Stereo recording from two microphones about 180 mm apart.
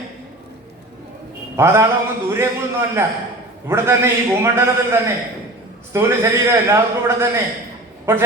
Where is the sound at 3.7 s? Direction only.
15° right (ahead or behind).